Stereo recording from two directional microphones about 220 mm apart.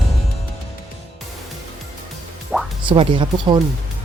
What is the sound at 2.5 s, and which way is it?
Music, centre (ahead or behind).